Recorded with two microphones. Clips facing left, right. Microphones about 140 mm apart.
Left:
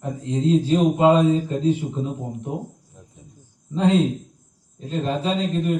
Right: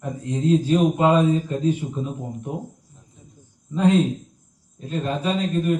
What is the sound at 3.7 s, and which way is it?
A man's voice, 25° left (ahead or behind).